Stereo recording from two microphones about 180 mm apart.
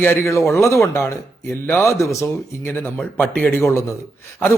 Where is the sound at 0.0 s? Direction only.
15° left (ahead or behind).